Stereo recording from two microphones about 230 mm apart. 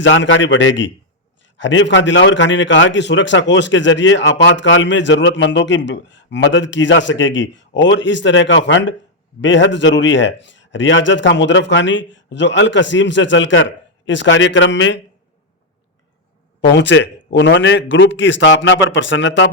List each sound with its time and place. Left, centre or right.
0.0 s a man's voice: left
16.6 s a man's voice: left